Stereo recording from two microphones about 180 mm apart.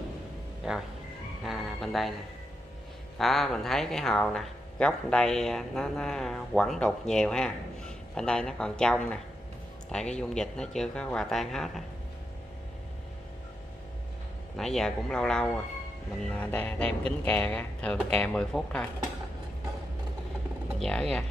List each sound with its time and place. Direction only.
0.7 s speech: 5° right (ahead or behind)
3.2 s speech: centre (ahead or behind)
14.6 s speech: 5° left (ahead or behind)
20.8 s speech: 5° left (ahead or behind)